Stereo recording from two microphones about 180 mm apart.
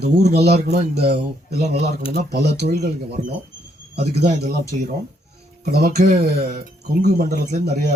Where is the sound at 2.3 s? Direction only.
65° right (ahead or behind).